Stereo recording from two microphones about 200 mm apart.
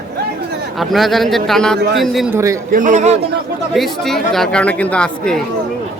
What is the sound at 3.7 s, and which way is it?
Speech, centre (ahead or behind).